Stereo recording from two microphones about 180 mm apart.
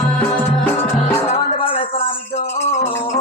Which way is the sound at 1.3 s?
30° left (ahead or behind).